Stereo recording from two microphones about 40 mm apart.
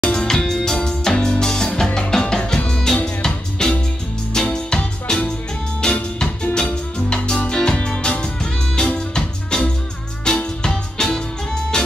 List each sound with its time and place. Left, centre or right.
0.1 s music: centre